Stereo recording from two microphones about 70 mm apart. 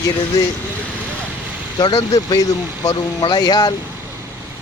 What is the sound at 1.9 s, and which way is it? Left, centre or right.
Speech, left.